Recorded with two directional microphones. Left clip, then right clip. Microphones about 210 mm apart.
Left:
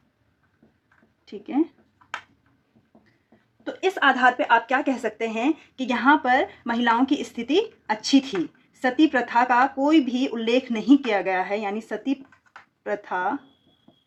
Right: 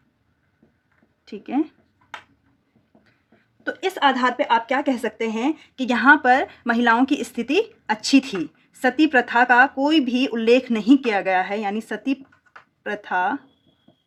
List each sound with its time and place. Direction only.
1.3 s speech: 45° right (ahead or behind)
3.6 s a sound: 50° right (ahead or behind)
4.0 s speech: 25° right (ahead or behind)
4.6 s speech: 45° right (ahead or behind)